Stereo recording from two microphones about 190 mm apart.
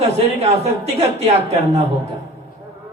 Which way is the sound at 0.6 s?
35° right (ahead or behind).